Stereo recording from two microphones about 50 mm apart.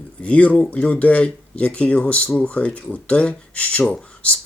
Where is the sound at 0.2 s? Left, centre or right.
Left.